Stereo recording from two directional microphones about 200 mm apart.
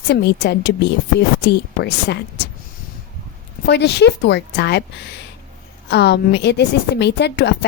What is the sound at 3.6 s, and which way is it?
Speech, 55° left (ahead or behind).